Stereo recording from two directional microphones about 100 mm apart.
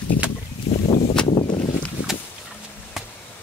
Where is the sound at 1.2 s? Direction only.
65° left (ahead or behind).